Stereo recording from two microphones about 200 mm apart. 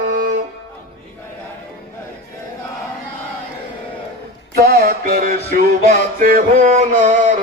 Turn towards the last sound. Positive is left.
turn(degrees=-40)  # may be behind; listen again after turning